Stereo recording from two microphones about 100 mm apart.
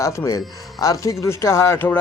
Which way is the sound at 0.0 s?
30° left (ahead or behind).